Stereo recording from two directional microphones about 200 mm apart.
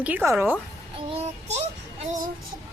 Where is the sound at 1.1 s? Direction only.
35° right (ahead or behind).